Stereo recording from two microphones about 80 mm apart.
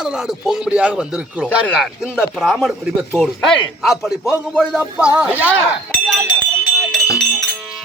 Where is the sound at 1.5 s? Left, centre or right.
Centre.